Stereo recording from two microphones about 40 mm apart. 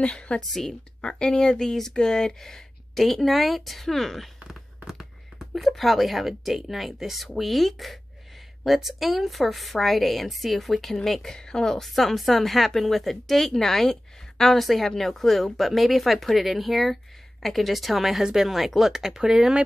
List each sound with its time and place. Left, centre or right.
0.0 s a woman's voice: left
0.4 s speech: centre
1.0 s speech: left; by 4.6 s centre
4.8 s speech: centre
11.3 s speech: centre